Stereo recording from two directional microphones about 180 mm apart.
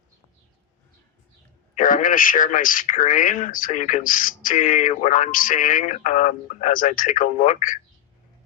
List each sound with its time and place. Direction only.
1.7 s speech: 50° left (ahead or behind)